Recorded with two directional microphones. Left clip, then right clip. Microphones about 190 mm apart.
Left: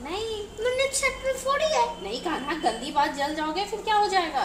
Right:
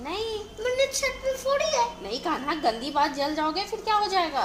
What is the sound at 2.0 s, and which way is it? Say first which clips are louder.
A woman's voice: right 1 dB; 40° right (ahead or behind).